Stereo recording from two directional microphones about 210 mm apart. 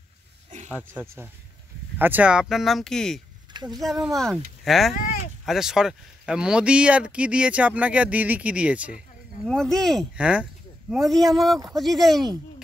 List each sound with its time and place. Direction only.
0.7 s speech: 10° right (ahead or behind)
4.9 s a sound: 40° left (ahead or behind)
5.4 s speech: centre (ahead or behind)